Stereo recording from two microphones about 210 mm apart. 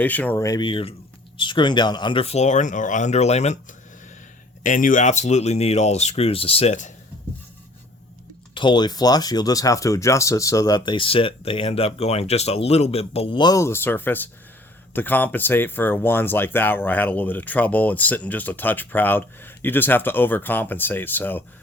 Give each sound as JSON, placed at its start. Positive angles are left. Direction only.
{"t": 0.0, "sound": "speech", "side_deg": 10}
{"t": 8.5, "sound": "speech", "side_deg": 20}